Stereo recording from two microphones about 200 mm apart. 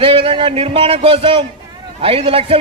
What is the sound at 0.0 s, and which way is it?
A man's voice, 25° right (ahead or behind).